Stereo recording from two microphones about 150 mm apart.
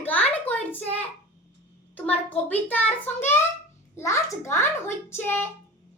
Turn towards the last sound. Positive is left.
turn(degrees=15)  # may be behind; listen again after turning